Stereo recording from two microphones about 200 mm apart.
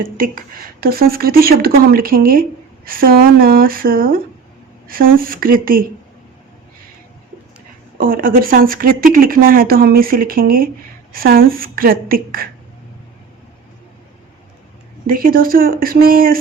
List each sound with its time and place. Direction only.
0.0 s a woman's voice: 45° right (ahead or behind)
7.9 s a woman's voice: 45° right (ahead or behind)
15.0 s a woman's voice: 45° right (ahead or behind)